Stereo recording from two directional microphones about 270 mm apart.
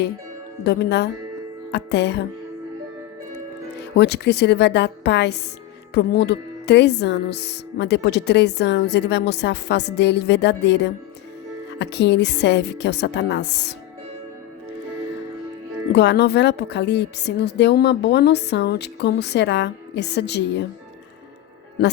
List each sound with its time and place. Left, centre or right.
0.6 s speech: left
3.8 s speech: left
15.9 s speech: left